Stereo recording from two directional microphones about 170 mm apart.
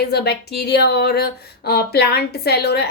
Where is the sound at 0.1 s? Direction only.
70° left (ahead or behind).